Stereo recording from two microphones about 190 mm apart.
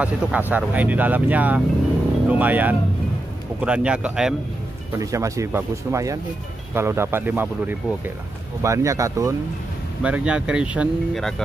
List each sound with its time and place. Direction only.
0.0 s speech: 10° right (ahead or behind)
4.9 s speech: 15° right (ahead or behind)
10.0 s speech: 5° right (ahead or behind)